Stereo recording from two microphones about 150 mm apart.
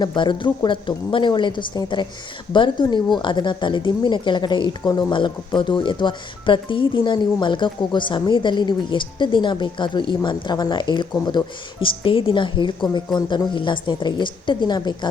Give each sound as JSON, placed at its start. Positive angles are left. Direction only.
{"t": 0.0, "sound": "speech", "side_deg": 30}